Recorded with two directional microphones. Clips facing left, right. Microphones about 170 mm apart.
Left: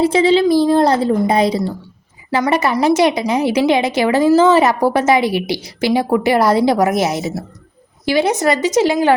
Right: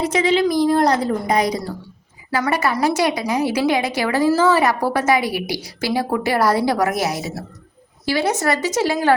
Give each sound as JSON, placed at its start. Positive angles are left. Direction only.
{"t": 0.0, "sound": "a woman's voice", "side_deg": 30}